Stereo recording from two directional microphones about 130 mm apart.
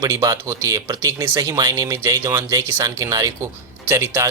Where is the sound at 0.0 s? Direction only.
25° right (ahead or behind).